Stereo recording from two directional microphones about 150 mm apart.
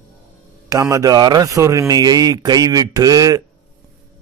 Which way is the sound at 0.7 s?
25° right (ahead or behind).